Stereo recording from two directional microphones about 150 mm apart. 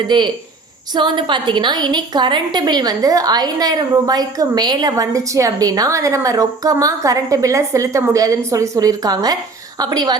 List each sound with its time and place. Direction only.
0.1 s a woman's voice: 30° right (ahead or behind)